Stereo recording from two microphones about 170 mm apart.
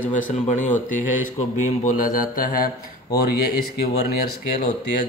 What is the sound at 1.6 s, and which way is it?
Mantra, 50° left (ahead or behind).